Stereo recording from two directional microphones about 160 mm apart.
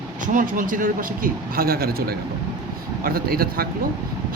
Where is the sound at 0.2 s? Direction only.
55° right (ahead or behind).